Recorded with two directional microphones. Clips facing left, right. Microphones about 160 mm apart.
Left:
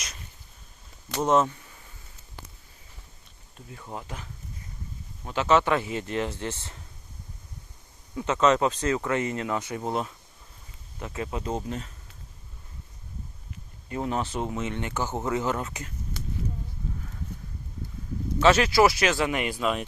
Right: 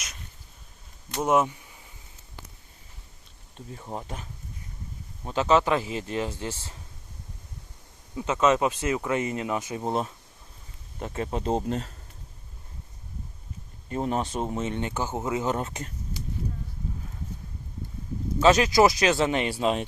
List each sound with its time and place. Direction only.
1.2 s speech: 10° right (ahead or behind)
3.7 s speech: 30° right (ahead or behind); by 6.7 s 10° right (ahead or behind)
8.1 s speech: 15° right (ahead or behind)
11.0 s speech: 35° right (ahead or behind)
14.0 s speech: 20° right (ahead or behind)
16.1 s a sound: 65° left (ahead or behind)
18.3 s speech: 20° right (ahead or behind)